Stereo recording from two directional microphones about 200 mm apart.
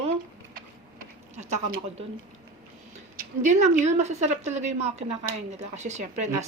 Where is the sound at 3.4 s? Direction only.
35° right (ahead or behind).